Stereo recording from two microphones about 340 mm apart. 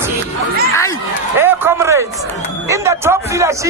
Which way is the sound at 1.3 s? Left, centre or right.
Centre.